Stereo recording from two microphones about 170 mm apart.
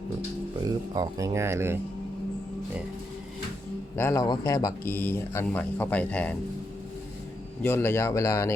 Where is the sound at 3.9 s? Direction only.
15° left (ahead or behind).